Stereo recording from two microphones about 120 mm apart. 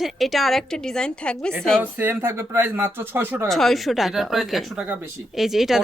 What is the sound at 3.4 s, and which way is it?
A woman's voice, centre (ahead or behind).